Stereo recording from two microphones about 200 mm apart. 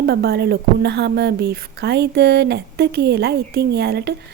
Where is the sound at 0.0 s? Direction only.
55° right (ahead or behind).